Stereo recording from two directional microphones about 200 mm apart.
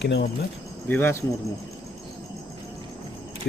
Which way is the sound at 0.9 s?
10° left (ahead or behind).